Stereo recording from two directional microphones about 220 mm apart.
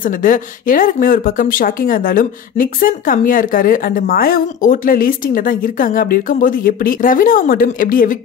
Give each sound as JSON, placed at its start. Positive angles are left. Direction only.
{"t": 0.0, "sound": "speech", "side_deg": 35}